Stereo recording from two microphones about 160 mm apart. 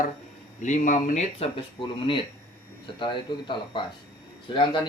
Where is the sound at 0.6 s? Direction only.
50° left (ahead or behind).